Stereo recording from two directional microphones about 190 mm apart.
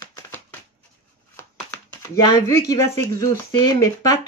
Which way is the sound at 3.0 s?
20° left (ahead or behind).